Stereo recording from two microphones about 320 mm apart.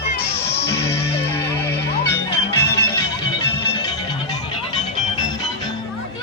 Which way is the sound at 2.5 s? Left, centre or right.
Left.